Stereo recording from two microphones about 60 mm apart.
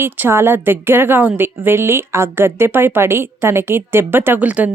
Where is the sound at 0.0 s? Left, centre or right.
Right.